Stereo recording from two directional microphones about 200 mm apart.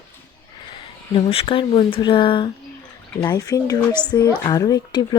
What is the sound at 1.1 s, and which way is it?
Speech, 25° left (ahead or behind).